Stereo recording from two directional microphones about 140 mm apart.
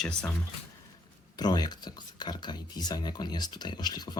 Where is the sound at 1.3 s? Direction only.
30° left (ahead or behind).